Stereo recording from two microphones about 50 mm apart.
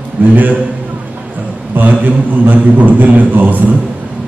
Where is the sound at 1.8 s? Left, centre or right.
Right.